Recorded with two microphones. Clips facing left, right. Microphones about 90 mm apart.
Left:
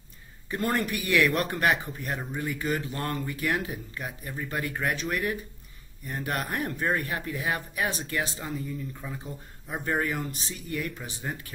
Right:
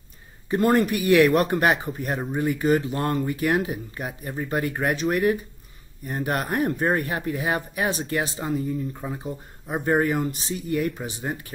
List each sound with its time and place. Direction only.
0.5 s speech: 30° right (ahead or behind)